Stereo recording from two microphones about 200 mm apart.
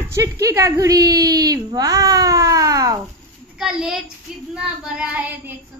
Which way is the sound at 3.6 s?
5° right (ahead or behind).